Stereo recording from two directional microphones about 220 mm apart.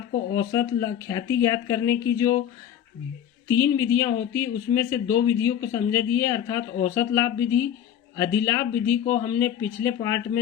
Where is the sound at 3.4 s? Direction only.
15° left (ahead or behind).